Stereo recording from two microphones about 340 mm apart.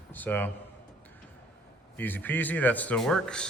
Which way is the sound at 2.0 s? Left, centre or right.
Centre.